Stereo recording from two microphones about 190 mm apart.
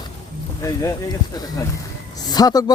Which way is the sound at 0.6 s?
15° left (ahead or behind).